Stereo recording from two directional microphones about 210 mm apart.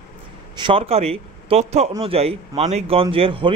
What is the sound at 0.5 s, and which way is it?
A man's voice, 25° right (ahead or behind).